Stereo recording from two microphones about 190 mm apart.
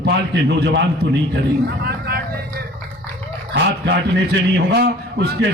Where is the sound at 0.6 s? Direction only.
60° right (ahead or behind).